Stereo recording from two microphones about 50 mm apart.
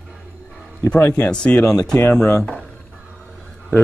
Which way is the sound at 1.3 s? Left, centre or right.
Left.